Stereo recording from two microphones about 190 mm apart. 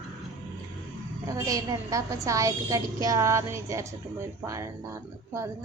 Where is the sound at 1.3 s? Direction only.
20° right (ahead or behind).